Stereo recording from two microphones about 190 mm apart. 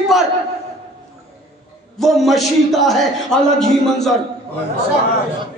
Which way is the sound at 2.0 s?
Centre (ahead or behind).